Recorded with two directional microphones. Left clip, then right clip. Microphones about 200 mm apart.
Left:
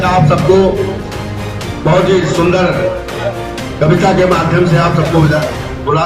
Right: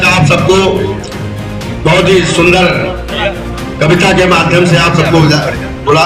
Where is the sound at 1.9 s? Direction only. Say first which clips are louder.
Right 3 dB; 20° right (ahead or behind).